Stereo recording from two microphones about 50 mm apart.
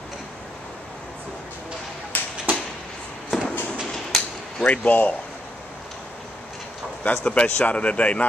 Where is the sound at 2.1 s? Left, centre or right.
Left.